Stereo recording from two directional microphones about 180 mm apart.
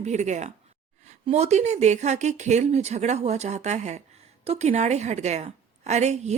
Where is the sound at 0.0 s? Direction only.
40° right (ahead or behind).